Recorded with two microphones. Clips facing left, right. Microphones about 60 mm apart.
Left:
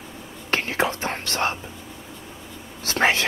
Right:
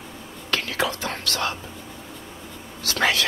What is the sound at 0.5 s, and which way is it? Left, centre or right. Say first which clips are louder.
Whispering: left 2 dB; left.